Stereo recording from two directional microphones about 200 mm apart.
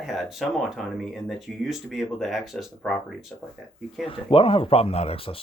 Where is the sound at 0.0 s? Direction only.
Centre (ahead or behind).